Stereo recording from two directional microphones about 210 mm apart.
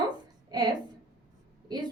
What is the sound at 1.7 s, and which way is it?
Speech, 20° right (ahead or behind).